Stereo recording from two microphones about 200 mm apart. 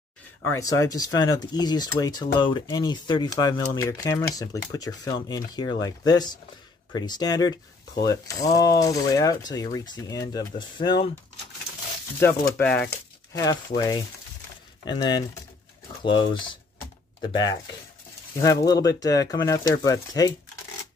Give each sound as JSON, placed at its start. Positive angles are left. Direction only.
{"t": 0.6, "sound": "speech", "side_deg": 15}
{"t": 12.2, "sound": "speech", "side_deg": 10}
{"t": 18.7, "sound": "speech", "side_deg": 20}